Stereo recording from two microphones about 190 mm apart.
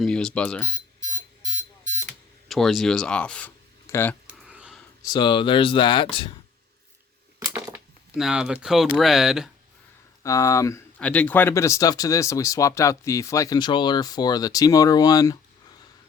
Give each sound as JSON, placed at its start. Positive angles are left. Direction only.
{"t": 0.0, "sound": "speech", "side_deg": 5}
{"t": 2.5, "sound": "speech", "side_deg": 0}
{"t": 4.4, "sound": "a sound", "side_deg": -5}
{"t": 5.0, "sound": "speech", "side_deg": 25}
{"t": 7.5, "sound": "a sound", "side_deg": -5}
{"t": 8.6, "sound": "speech", "side_deg": 0}
{"t": 10.2, "sound": "speech", "side_deg": 15}